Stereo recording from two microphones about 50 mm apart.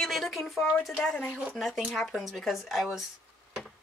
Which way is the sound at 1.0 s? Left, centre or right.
Centre.